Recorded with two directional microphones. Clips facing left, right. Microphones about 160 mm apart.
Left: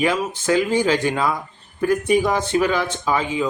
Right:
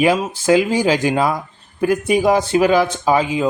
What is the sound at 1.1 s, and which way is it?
Speech, 40° right (ahead or behind).